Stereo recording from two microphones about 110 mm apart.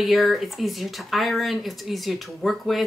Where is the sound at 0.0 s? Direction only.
Centre (ahead or behind).